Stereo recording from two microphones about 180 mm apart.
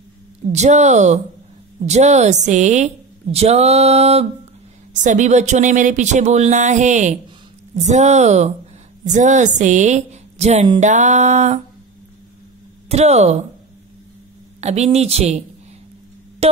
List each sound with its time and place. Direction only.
0.5 s a woman's voice: 40° right (ahead or behind)
12.8 s speech: 35° right (ahead or behind)
14.6 s a woman's voice: 40° right (ahead or behind)